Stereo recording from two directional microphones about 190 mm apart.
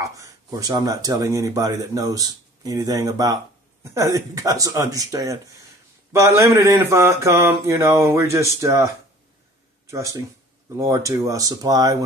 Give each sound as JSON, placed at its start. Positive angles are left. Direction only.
{"t": 0.0, "sound": "speech", "side_deg": -15}